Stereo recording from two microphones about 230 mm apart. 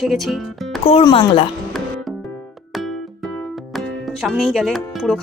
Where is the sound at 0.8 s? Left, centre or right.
Left.